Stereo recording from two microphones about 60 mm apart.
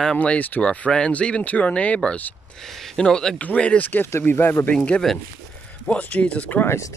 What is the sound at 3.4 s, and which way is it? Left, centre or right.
Speech, left.